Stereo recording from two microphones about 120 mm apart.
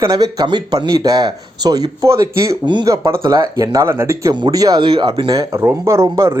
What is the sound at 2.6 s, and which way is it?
Speech, 40° right (ahead or behind).